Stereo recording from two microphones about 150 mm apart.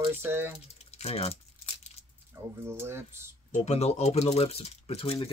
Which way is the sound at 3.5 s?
45° left (ahead or behind).